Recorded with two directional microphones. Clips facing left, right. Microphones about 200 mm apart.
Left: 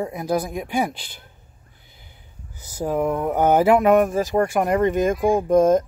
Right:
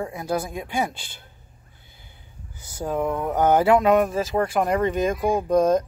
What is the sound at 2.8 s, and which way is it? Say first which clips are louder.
Speech: left 3 dB; 10° left (ahead or behind).